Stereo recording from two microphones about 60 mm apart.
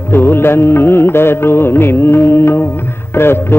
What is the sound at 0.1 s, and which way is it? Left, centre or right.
Music, left.